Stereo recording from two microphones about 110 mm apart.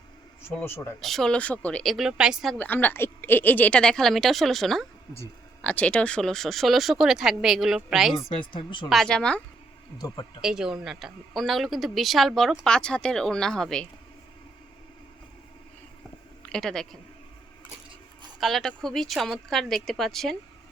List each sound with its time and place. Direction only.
0.4 s speech: 20° left (ahead or behind)
1.0 s speech: 5° left (ahead or behind)
1.8 s a woman's voice: centre (ahead or behind)
2.6 s a woman's voice: 15° left (ahead or behind); by 8.1 s 5° right (ahead or behind)
8.4 s a woman's voice: 45° left (ahead or behind)
8.9 s speech: 5° left (ahead or behind)
10.0 s speech: 40° left (ahead or behind)
10.4 s a woman's voice: 5° right (ahead or behind)
16.5 s a woman's voice: 5° left (ahead or behind)
18.3 s a woman's voice: centre (ahead or behind)